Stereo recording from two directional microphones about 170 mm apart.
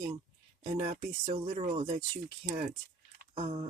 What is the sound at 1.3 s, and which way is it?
Speech, 35° right (ahead or behind).